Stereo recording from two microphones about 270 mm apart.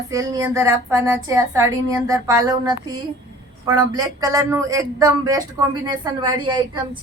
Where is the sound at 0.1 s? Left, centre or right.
Centre.